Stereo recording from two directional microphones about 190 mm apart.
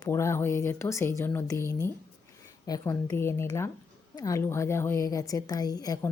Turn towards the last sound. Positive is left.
turn(degrees=20)  # may be behind; listen again after turning